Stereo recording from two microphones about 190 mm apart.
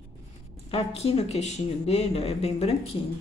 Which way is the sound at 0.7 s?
30° left (ahead or behind).